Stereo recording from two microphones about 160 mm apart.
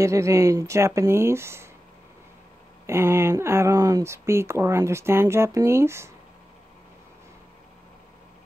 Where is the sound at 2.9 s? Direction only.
15° right (ahead or behind).